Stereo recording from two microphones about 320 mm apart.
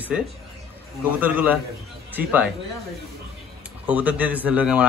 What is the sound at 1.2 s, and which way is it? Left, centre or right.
Speech, centre.